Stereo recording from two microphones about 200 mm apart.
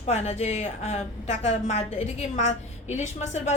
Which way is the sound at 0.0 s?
35° left (ahead or behind).